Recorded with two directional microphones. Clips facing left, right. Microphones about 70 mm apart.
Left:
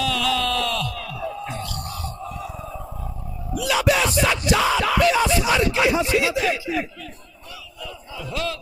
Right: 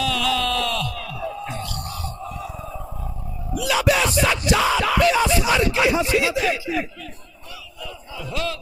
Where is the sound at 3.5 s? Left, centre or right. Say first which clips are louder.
Even; centre.